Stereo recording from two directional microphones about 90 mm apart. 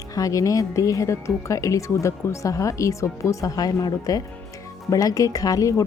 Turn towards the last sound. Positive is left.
turn(degrees=40)  # may be behind; listen again after turning